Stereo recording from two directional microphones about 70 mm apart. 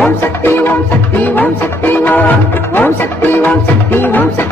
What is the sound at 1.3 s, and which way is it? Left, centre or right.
Music, left.